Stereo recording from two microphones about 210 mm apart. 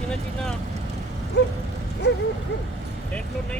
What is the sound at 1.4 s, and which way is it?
Speech, 55° left (ahead or behind).